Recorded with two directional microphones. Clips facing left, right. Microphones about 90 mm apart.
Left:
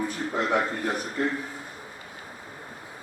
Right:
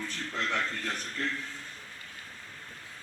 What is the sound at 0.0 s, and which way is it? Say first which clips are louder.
Speech: left 7 dB; 15° left (ahead or behind).